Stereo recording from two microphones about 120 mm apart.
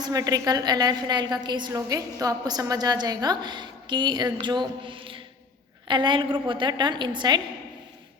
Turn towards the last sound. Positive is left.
turn(degrees=-35)  # may be behind; listen again after turning